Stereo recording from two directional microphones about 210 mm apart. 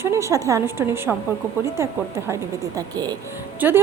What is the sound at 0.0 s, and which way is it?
A woman's voice, 15° right (ahead or behind).